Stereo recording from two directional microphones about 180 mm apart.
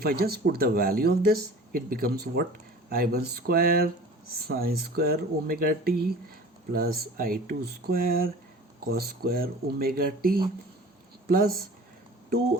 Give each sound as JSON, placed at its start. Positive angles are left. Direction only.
{"t": 0.0, "sound": "speech", "side_deg": -55}